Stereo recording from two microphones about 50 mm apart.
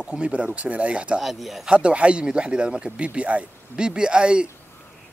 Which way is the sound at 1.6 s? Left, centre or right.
Right.